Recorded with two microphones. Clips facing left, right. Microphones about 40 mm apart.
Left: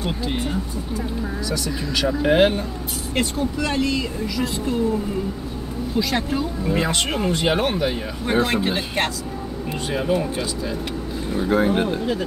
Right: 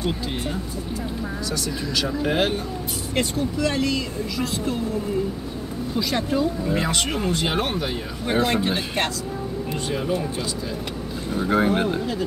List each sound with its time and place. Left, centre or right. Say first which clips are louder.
0.0 s speech: left 1 dB; centre
2.0 s speech: left 6 dB; centre
5.9 s speech: left 1 dB; centre
11.4 s speech: left 1 dB; centre